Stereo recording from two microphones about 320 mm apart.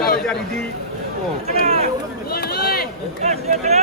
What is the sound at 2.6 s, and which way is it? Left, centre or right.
Run, left.